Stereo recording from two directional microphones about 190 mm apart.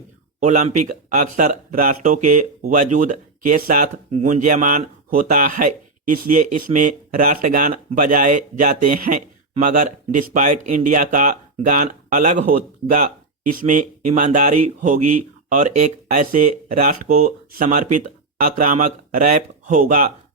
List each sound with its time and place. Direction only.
0.3 s a man's voice: 40° right (ahead or behind)
13.6 s a man's voice: 45° right (ahead or behind)